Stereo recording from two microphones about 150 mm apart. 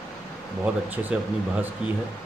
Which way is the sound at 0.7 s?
10° right (ahead or behind).